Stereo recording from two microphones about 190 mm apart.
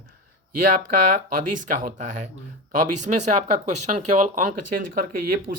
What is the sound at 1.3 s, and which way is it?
Speech, 40° right (ahead or behind).